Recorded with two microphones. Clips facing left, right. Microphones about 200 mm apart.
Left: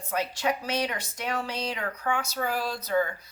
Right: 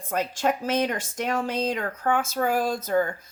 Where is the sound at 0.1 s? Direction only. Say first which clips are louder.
Right 3 dB; 50° right (ahead or behind).